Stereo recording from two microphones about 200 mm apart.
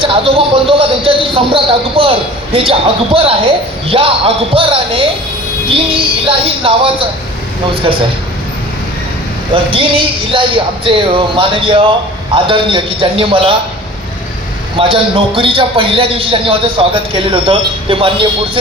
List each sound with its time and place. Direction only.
0.0 s speech: 25° right (ahead or behind)
6.2 s speech: 25° right (ahead or behind)
9.7 s speech: 25° right (ahead or behind)
14.8 s speech: 25° right (ahead or behind)